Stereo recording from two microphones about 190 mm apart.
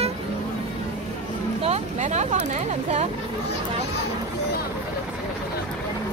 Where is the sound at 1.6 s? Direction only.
35° right (ahead or behind).